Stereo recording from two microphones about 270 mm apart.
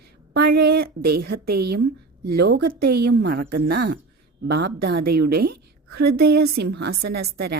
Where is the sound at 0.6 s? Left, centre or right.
Right.